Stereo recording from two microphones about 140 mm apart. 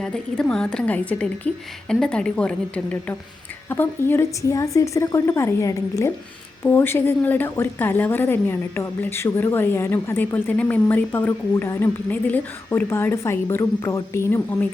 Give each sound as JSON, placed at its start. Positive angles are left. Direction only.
{"t": 0.0, "sound": "a woman's voice", "side_deg": 5}